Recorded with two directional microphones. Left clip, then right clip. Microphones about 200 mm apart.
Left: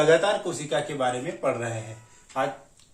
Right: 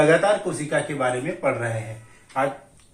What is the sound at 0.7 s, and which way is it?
Speech, 35° left (ahead or behind).